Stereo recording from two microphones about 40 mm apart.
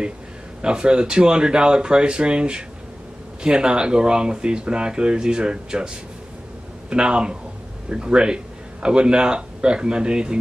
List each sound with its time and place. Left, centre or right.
0.6 s speech: right
6.9 s speech: right